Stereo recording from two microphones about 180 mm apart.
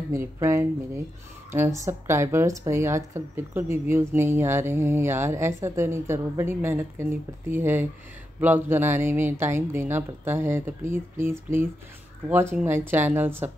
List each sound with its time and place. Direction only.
0.1 s speech: 15° right (ahead or behind)